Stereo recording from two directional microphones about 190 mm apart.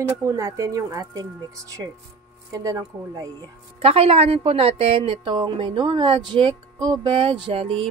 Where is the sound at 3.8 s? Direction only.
30° right (ahead or behind).